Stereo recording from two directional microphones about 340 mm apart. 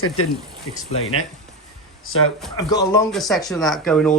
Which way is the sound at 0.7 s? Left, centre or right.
Left.